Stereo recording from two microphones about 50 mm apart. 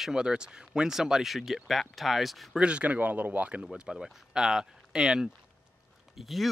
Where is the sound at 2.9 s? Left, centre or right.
Right.